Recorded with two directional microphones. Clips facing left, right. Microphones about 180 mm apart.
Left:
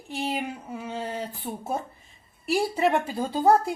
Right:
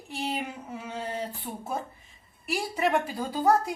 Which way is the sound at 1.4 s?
25° left (ahead or behind).